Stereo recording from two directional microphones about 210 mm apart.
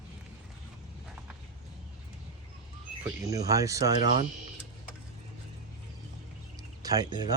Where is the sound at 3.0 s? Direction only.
15° right (ahead or behind).